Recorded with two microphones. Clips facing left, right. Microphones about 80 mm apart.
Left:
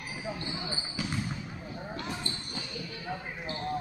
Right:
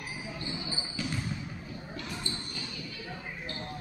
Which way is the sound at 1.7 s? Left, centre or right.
Left.